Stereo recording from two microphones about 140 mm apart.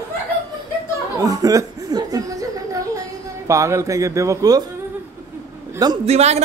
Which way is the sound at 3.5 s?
20° right (ahead or behind).